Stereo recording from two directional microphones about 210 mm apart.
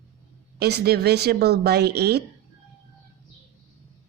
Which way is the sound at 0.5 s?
50° right (ahead or behind).